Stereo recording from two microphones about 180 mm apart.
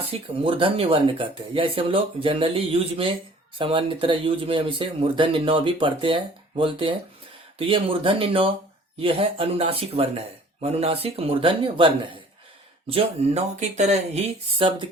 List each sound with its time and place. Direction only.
0.0 s speech: 30° right (ahead or behind)
12.9 s speech: 35° right (ahead or behind)